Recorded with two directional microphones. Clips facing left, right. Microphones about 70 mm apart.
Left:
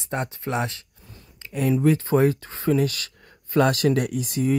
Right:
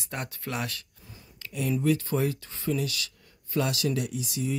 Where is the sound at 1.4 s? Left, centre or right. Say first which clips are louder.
Left 3 dB; left.